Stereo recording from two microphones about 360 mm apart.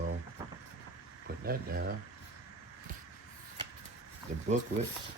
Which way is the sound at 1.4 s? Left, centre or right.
Right.